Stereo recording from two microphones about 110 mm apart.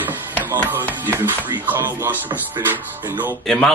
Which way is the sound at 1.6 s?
15° right (ahead or behind).